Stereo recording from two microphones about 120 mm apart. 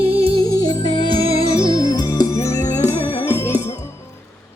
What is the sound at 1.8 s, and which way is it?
Music, 30° left (ahead or behind).